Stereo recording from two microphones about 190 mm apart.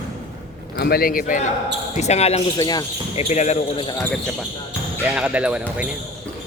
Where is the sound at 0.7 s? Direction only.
55° left (ahead or behind).